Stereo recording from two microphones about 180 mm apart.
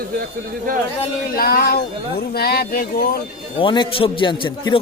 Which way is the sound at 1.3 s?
55° left (ahead or behind).